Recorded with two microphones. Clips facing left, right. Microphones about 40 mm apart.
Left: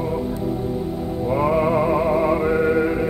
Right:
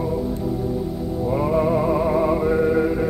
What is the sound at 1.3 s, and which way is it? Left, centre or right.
Music, left.